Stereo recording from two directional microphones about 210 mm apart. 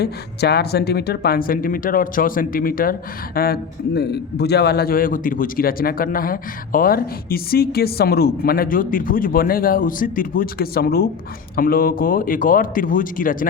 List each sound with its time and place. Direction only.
0.0 s a man's voice: 50° left (ahead or behind)